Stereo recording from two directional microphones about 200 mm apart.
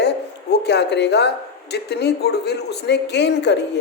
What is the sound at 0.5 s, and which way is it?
Speech, 55° left (ahead or behind).